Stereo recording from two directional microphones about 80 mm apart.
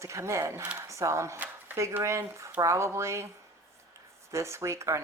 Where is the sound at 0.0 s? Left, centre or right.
Right.